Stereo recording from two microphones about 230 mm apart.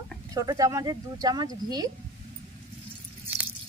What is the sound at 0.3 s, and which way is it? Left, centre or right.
Speech, centre.